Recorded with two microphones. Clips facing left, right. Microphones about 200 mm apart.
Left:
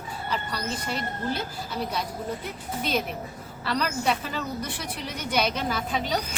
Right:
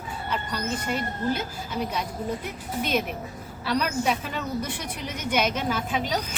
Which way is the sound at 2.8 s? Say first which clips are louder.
Right 2 dB; 35° left (ahead or behind).